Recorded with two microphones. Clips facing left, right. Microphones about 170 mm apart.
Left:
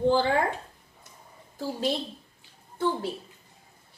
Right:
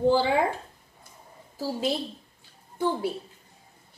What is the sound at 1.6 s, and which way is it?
Speech, 5° right (ahead or behind).